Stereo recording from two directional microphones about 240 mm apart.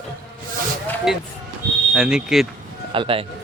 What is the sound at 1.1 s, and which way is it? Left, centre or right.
Speech, centre.